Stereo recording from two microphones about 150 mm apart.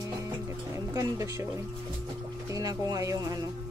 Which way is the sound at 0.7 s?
20° right (ahead or behind).